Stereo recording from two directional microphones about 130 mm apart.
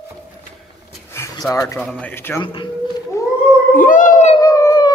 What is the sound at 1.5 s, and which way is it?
Speech, 25° left (ahead or behind).